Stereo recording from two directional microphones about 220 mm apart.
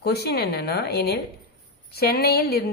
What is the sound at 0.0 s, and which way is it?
Speech, 45° left (ahead or behind).